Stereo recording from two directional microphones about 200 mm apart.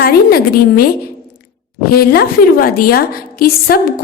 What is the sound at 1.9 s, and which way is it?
A woman's voice, 50° left (ahead or behind).